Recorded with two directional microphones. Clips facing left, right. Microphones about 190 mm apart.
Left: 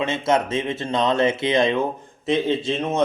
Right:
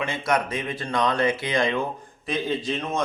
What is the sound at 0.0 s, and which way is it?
Speech, 25° left (ahead or behind).